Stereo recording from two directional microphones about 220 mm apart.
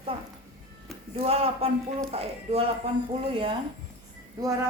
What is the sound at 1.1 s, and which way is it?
Speech, 25° right (ahead or behind).